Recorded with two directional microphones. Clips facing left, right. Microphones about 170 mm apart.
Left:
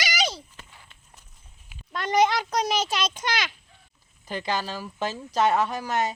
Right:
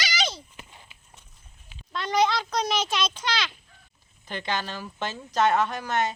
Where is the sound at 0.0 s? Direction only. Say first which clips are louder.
Left 2 dB; 40° left (ahead or behind).